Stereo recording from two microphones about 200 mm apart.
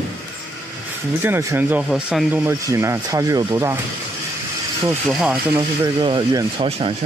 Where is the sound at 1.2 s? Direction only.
10° right (ahead or behind).